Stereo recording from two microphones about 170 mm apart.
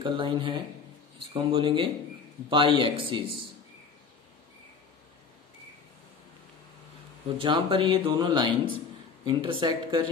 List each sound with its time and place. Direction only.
0.0 s speech: 30° right (ahead or behind)
7.3 s speech: 30° right (ahead or behind)